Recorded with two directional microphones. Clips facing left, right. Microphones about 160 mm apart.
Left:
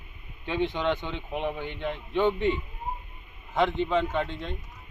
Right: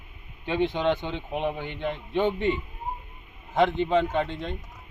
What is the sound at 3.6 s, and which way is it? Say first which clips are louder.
Speech: right 3 dB; 35° right (ahead or behind).